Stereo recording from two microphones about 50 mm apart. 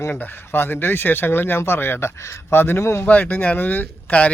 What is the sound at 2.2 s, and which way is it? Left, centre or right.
Speech, left.